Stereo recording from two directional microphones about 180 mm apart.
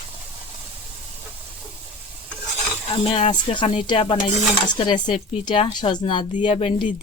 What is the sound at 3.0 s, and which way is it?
Speech, 30° left (ahead or behind).